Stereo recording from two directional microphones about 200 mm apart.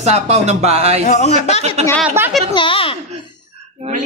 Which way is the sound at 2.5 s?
25° left (ahead or behind).